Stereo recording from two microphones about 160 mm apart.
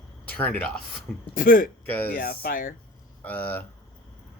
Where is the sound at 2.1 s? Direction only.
70° left (ahead or behind).